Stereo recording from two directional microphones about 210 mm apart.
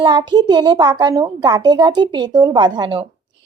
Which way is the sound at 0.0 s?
20° right (ahead or behind).